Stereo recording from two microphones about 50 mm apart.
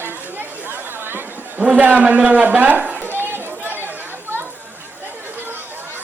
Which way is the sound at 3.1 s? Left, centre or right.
Right.